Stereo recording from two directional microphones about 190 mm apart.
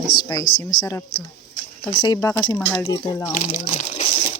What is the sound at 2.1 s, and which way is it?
Speech, 10° left (ahead or behind).